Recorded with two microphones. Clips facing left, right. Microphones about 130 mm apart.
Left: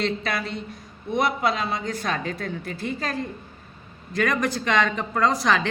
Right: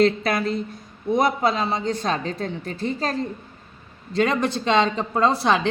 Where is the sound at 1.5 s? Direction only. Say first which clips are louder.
Right 3 dB; 30° right (ahead or behind).